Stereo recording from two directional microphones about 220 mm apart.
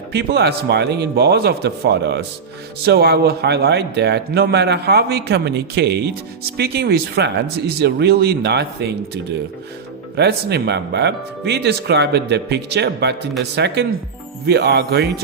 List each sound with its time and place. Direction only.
0.1 s a man's voice: 50° right (ahead or behind)